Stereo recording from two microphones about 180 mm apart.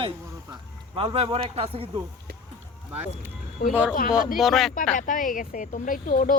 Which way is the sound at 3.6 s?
55° left (ahead or behind).